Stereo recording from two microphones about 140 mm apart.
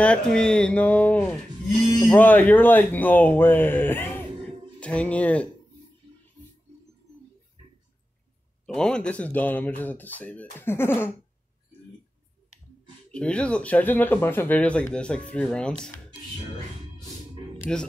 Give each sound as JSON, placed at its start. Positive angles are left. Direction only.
{"t": 0.0, "sound": "speech", "side_deg": 5}
{"t": 8.6, "sound": "speech", "side_deg": 5}
{"t": 13.1, "sound": "speech", "side_deg": 10}
{"t": 17.7, "sound": "speech", "side_deg": 5}